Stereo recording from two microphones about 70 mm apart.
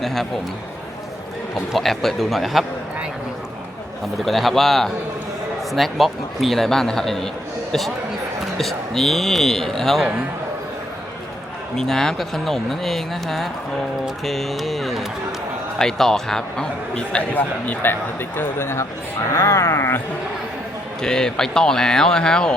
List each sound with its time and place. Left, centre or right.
0.0 s a man's voice: centre
1.5 s speech: centre
4.3 s speech: centre
8.5 s speech: centre
11.8 s speech: centre; by 17.9 s left
18.3 s speech: left
21.0 s speech: centre